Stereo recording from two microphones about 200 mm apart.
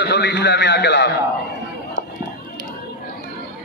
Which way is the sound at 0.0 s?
55° left (ahead or behind).